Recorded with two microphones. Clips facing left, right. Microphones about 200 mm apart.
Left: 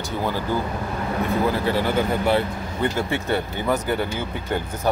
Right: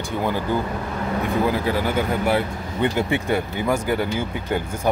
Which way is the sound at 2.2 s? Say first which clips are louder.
Even; 15° right (ahead or behind).